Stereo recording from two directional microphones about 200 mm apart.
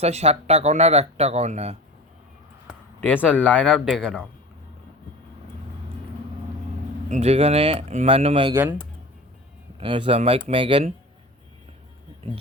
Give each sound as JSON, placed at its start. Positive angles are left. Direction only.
{"t": 0.0, "sound": "speech", "side_deg": -30}
{"t": 3.0, "sound": "speech", "side_deg": 10}
{"t": 7.1, "sound": "speech", "side_deg": -30}
{"t": 9.8, "sound": "speech", "side_deg": -25}